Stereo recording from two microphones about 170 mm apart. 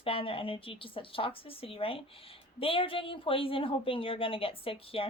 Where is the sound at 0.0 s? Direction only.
35° left (ahead or behind).